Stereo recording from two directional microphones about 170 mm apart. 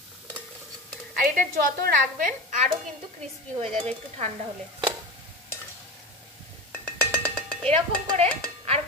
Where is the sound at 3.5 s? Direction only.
35° right (ahead or behind).